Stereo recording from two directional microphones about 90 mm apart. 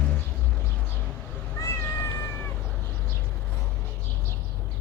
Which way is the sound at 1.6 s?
30° left (ahead or behind).